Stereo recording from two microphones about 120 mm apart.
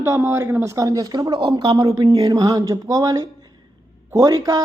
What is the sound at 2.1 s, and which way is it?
Speech, 30° right (ahead or behind).